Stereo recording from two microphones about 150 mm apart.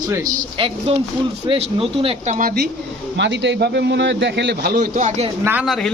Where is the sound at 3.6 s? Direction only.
90° right.